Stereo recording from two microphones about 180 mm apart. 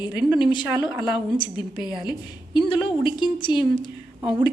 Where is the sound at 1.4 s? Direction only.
25° left (ahead or behind).